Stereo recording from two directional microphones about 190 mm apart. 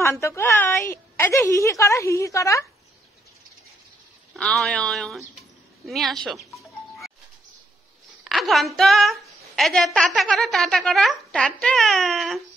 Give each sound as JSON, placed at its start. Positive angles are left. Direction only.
{"t": 0.0, "sound": "a woman's voice", "side_deg": 15}
{"t": 4.3, "sound": "speech", "side_deg": 5}
{"t": 5.9, "sound": "music", "side_deg": 0}
{"t": 8.2, "sound": "a woman's voice", "side_deg": 0}